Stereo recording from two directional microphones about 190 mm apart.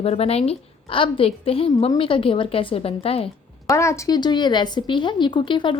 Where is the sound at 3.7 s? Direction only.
15° left (ahead or behind).